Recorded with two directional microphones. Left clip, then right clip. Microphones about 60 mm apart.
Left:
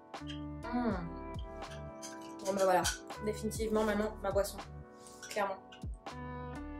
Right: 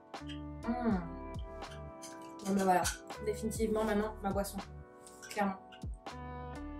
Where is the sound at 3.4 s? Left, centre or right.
Centre.